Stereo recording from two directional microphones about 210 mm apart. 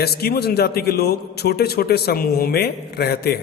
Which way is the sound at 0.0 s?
50° left (ahead or behind).